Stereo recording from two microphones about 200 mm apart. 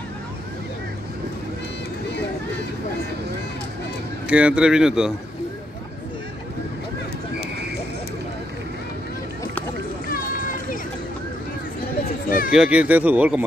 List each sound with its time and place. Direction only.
4.3 s speech: 5° right (ahead or behind)
10.0 s run: 45° left (ahead or behind)
12.4 s speech: 5° right (ahead or behind)